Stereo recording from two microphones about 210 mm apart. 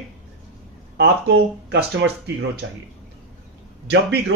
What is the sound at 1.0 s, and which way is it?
Speech, 55° right (ahead or behind).